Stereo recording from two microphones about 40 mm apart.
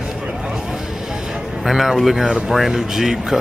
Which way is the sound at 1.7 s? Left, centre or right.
Centre.